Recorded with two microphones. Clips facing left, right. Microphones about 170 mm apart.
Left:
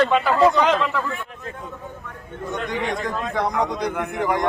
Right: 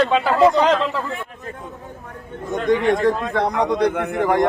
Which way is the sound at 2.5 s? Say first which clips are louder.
Right 9 dB; 50° right (ahead or behind).